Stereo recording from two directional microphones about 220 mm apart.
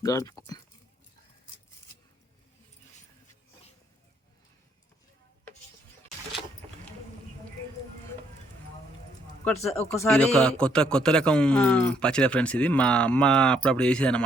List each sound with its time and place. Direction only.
0.0 s speech: 15° left (ahead or behind)
9.4 s a man's voice: 10° left (ahead or behind)